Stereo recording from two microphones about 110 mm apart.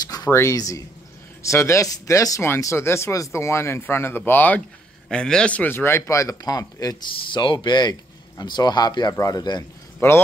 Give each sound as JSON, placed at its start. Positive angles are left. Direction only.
{"t": 0.0, "sound": "a sound", "side_deg": 35}
{"t": 0.3, "sound": "speech", "side_deg": 25}
{"t": 10.0, "sound": "speech", "side_deg": 20}